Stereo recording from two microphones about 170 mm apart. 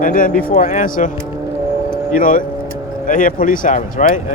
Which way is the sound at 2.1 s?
50° left (ahead or behind).